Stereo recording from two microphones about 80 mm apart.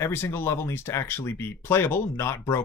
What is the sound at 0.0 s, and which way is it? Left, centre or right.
Speech, left.